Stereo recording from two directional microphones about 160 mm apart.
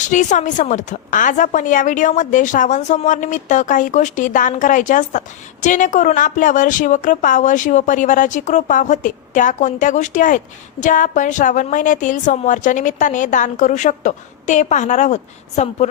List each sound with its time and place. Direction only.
0.1 s a woman's voice: 50° left (ahead or behind)